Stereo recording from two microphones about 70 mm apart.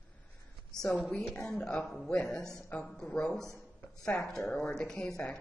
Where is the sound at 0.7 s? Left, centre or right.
Centre.